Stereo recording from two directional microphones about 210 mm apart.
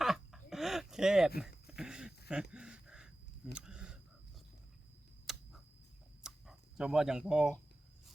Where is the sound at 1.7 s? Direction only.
5° right (ahead or behind).